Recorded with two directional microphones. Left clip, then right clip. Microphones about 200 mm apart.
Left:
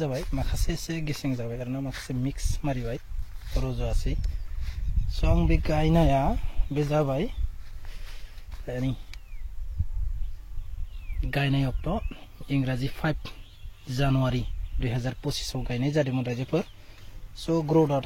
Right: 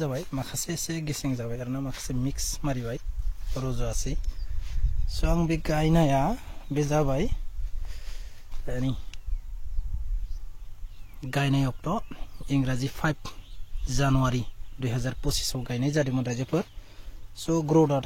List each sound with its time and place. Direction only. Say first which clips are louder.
0.3 s speech: right 1 dB; 10° right (ahead or behind)
8.6 s speech: even; 15° right (ahead or behind)
11.1 s speech: right 1 dB; 15° right (ahead or behind)
16.2 s speech: even; 20° right (ahead or behind)